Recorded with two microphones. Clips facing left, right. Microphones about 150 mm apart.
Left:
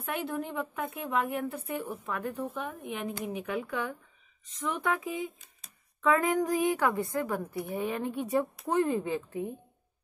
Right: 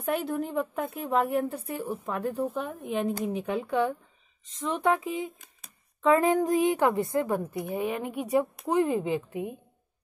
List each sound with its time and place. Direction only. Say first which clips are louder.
0.0 s a woman's voice: right 5 dB; 40° right (ahead or behind); by 9.6 s 15° right (ahead or behind)